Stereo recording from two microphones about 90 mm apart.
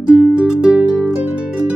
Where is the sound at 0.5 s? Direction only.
10° right (ahead or behind).